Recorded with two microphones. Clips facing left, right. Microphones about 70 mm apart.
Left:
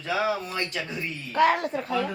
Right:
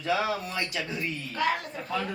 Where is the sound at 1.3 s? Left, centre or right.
Left.